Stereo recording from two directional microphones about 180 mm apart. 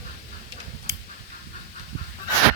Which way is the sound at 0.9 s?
15° right (ahead or behind).